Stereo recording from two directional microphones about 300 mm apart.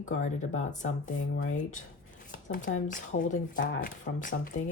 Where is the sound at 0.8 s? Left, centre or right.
Left.